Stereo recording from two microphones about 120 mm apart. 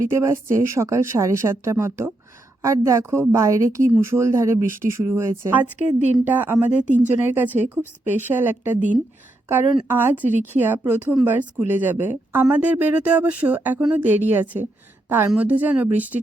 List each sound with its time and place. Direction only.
0.0 s a woman's voice: 25° right (ahead or behind)
9.9 s speech: 15° right (ahead or behind)